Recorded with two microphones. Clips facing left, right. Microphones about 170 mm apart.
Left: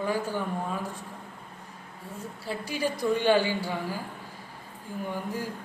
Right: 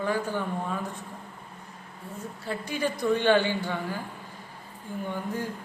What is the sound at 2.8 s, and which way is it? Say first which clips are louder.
Speech: right 1 dB; 10° left (ahead or behind).